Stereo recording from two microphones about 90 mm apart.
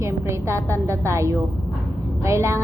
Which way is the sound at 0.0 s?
30° right (ahead or behind).